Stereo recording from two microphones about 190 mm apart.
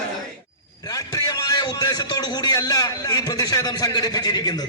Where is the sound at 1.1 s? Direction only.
20° left (ahead or behind).